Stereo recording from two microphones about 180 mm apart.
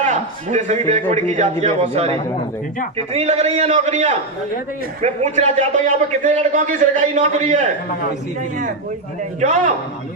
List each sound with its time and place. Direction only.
0.0 s a man's voice: 40° right (ahead or behind)